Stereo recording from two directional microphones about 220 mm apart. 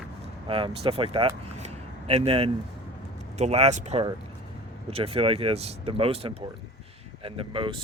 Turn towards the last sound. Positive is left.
turn(degrees=-25)  # may be behind; listen again after turning